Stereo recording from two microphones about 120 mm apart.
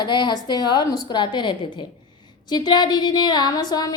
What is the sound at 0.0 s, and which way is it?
A woman's voice, 40° left (ahead or behind).